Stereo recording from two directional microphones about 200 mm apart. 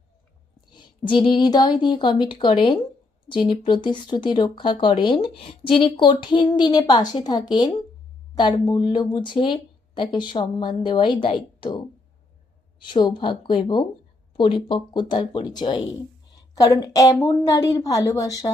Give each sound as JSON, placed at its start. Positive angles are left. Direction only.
{"t": 0.7, "sound": "speech", "side_deg": 25}
{"t": 12.8, "sound": "a woman's voice", "side_deg": 25}